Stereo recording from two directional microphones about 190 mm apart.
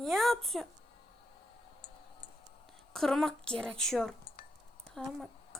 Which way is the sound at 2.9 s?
Centre (ahead or behind).